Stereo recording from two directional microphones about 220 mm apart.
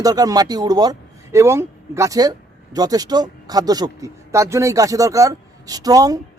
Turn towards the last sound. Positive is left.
turn(degrees=-15)  # may be behind; listen again after turning